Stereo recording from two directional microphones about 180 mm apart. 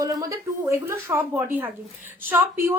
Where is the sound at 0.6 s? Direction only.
15° right (ahead or behind).